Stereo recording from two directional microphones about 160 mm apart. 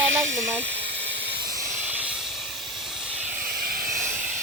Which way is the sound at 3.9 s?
15° right (ahead or behind).